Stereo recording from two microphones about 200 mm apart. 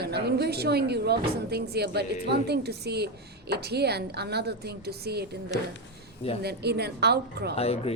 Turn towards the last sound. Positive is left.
turn(degrees=30)  # may be behind; listen again after turning